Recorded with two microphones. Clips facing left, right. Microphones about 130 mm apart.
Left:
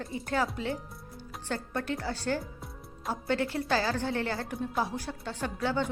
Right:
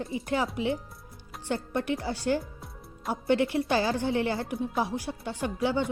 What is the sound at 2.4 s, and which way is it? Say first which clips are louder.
Music: left 1 dB; centre (ahead or behind).